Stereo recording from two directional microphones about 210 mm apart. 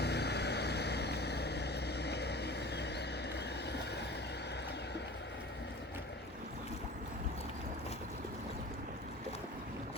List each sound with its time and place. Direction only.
0.0 s vehicle: 50° left (ahead or behind)